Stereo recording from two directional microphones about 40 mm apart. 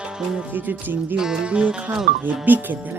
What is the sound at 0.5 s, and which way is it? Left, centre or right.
Music, right.